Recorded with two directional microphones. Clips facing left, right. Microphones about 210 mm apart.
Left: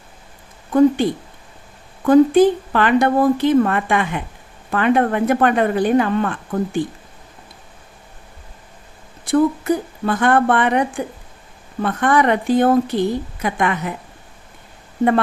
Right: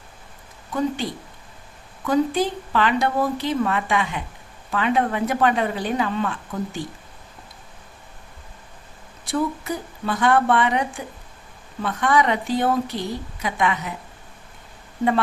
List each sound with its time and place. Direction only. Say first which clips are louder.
2.0 s a woman's voice: left 10 dB; 50° left (ahead or behind)
9.2 s a woman's voice: left 8 dB; 55° left (ahead or behind)